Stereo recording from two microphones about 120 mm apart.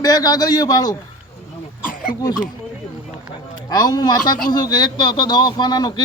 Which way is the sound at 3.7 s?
35° left (ahead or behind).